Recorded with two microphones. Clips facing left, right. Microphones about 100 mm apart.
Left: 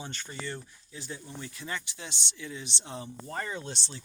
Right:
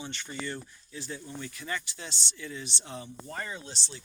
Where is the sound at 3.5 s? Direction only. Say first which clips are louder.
Left 3 dB; 55° left (ahead or behind).